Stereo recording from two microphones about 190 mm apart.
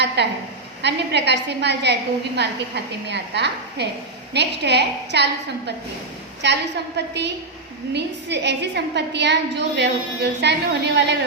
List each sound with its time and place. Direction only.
0.2 s a woman's voice: 60° right (ahead or behind)